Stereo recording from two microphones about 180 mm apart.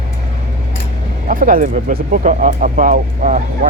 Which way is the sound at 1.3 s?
50° right (ahead or behind).